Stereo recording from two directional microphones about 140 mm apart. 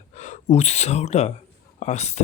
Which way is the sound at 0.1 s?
55° left (ahead or behind).